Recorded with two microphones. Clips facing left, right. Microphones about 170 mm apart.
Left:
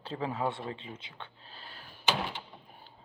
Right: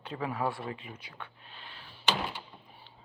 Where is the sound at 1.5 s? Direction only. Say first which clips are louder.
Even; 40° left (ahead or behind).